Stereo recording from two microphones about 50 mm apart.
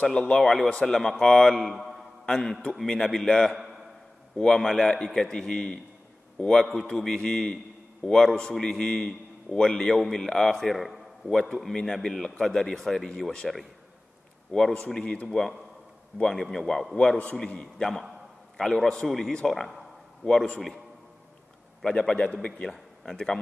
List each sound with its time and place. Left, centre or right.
0.0 s a man's voice: centre
1.7 s a sound: centre
2.2 s a man's voice: centre
4.6 s a man's voice: centre
13.4 s speech: centre
14.5 s a man's voice: centre
19.0 s a man's voice: centre
21.8 s a man's voice: centre